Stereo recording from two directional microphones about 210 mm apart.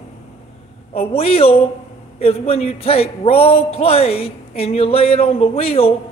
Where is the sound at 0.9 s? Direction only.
25° left (ahead or behind).